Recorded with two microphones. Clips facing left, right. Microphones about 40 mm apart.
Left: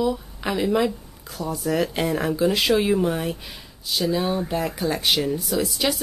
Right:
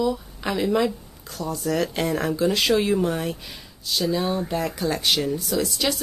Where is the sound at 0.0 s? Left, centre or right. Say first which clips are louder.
Even; centre.